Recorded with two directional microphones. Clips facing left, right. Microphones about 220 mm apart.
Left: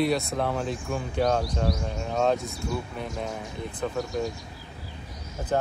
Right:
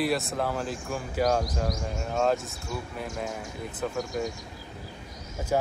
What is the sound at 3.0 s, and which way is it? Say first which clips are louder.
Speech: left 1 dB; 5° right (ahead or behind).